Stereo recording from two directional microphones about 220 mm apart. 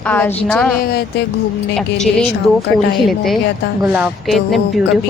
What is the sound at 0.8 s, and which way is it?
Speech, 45° left (ahead or behind).